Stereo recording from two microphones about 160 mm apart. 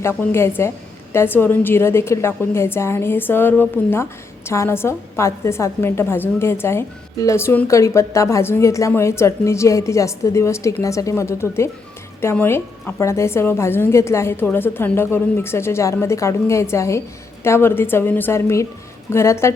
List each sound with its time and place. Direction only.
0.0 s a woman's voice: 15° left (ahead or behind)